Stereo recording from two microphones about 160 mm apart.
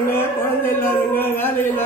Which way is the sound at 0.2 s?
15° left (ahead or behind).